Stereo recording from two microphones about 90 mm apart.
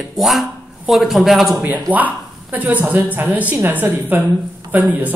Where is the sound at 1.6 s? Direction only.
20° right (ahead or behind).